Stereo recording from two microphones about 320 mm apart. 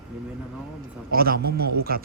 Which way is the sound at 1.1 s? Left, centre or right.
Right.